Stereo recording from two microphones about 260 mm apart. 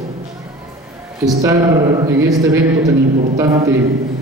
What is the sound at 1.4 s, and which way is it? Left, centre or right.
A woman's voice, centre.